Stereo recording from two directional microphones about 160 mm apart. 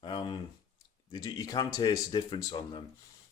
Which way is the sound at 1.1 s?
25° left (ahead or behind).